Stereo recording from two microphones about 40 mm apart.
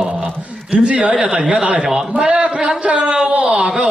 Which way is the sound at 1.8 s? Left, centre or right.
Centre.